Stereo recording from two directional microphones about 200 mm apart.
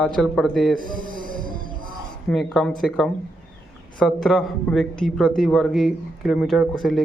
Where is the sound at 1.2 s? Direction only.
45° right (ahead or behind).